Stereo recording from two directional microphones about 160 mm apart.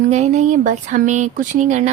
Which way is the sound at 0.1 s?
45° right (ahead or behind).